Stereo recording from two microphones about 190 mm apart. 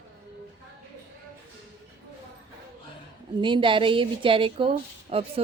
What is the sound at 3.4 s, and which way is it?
Speech, 25° right (ahead or behind).